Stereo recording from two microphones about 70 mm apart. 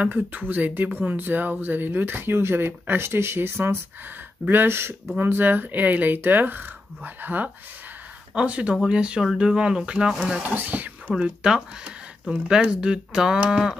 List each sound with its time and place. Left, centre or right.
0.0 s speech: right; by 10.4 s centre
10.4 s speech: right
11.1 s speech: centre
13.5 s a sound: centre